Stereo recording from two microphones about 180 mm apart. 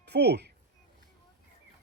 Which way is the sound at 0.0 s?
70° right (ahead or behind).